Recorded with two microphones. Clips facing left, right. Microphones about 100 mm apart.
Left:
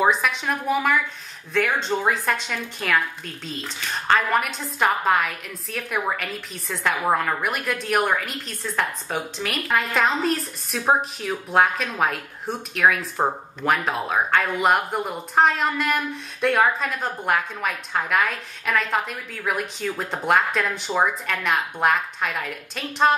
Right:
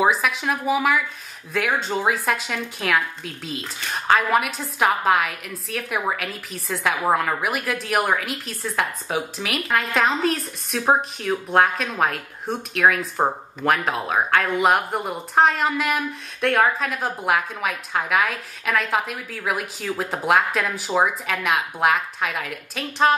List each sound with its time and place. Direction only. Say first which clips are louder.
0.0 s speech: right 1 dB; 5° right (ahead or behind)